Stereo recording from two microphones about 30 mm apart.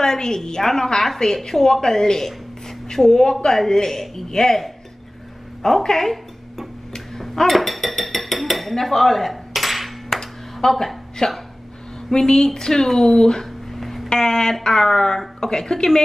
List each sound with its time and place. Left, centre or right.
0.0 s a woman's voice: left
5.6 s speech: centre
6.9 s a sound: centre
7.4 s dishes: centre
10.7 s a woman's voice: centre
11.2 s a woman's voice: left
13.7 s a sound: centre
14.0 s a woman's voice: left